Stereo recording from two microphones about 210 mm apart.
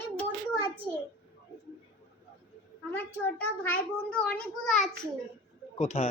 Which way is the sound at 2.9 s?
10° left (ahead or behind).